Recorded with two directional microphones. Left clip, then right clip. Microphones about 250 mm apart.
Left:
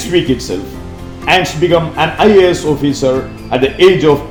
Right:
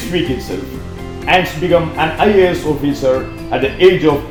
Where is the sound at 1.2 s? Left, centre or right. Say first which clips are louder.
Left 2 dB; left.